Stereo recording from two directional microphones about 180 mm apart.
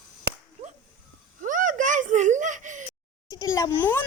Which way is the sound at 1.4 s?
45° right (ahead or behind).